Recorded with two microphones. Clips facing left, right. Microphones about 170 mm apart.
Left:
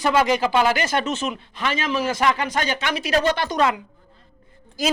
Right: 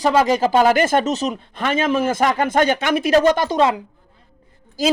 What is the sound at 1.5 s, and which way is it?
Speech, 50° right (ahead or behind).